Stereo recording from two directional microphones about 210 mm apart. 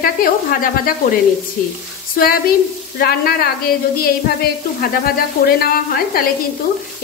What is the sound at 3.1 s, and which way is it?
Speech, 45° left (ahead or behind).